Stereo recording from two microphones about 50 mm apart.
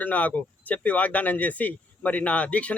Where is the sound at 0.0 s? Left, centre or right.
Left.